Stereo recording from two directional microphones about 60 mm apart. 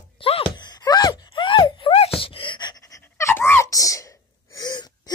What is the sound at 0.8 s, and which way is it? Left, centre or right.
Groan, left.